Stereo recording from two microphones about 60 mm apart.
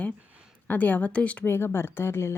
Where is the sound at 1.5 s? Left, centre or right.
Left.